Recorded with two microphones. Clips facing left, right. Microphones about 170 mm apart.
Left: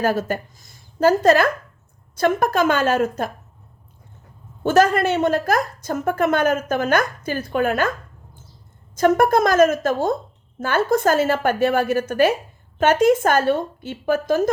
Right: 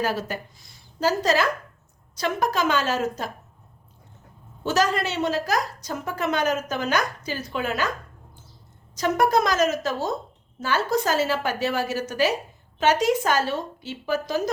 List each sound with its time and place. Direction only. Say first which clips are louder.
0.0 s a woman's voice: left 6 dB; 50° left (ahead or behind)
4.6 s a woman's voice: left 7 dB; 50° left (ahead or behind)
9.0 s a woman's voice: left 5 dB; 50° left (ahead or behind)